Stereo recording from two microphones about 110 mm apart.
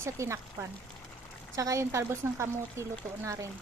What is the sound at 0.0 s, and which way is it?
Speech, 25° right (ahead or behind).